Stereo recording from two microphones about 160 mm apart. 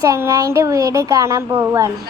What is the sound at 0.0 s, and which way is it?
Speech, 20° right (ahead or behind).